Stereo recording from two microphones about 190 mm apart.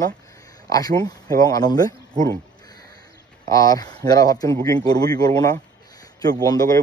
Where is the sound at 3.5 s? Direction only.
20° left (ahead or behind).